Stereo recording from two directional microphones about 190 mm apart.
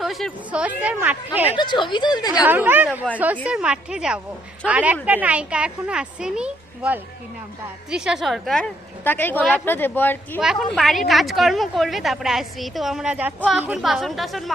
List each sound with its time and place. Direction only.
0.0 s speech: centre (ahead or behind)
1.5 s speech: 25° left (ahead or behind)
2.4 s a woman's voice: 10° right (ahead or behind); by 10.4 s 10° left (ahead or behind)
10.4 s a woman's voice: 5° right (ahead or behind)